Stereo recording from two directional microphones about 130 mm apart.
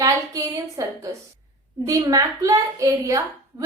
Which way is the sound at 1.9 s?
25° right (ahead or behind).